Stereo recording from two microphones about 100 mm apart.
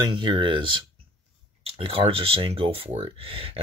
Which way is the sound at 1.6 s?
65° right (ahead or behind).